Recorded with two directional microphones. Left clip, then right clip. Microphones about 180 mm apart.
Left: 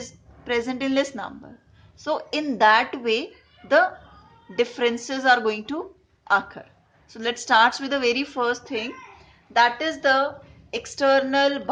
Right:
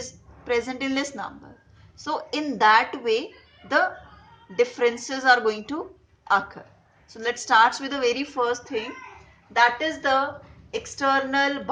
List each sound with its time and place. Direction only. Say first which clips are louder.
0.0 s a woman's voice: even; 40° left (ahead or behind)
4.5 s a woman's voice: right 1 dB; 40° left (ahead or behind)